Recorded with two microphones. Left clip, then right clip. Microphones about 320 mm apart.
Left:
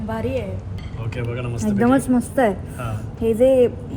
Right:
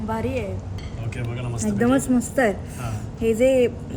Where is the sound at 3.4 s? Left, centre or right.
Left.